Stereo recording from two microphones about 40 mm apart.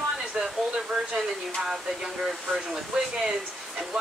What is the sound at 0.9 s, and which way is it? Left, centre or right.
Speech, right.